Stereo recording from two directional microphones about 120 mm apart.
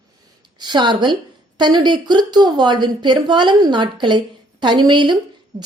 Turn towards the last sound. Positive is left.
turn(degrees=-40)  # may be behind; listen again after turning